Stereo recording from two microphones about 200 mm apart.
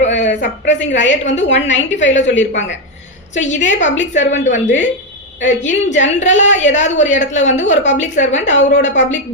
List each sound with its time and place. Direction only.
0.3 s a woman's voice: 60° left (ahead or behind)
3.3 s a woman's voice: 35° left (ahead or behind)